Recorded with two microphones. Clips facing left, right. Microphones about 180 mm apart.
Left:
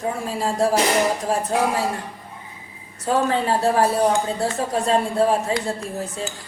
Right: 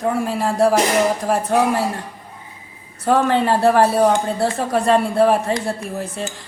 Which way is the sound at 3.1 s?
65° right (ahead or behind).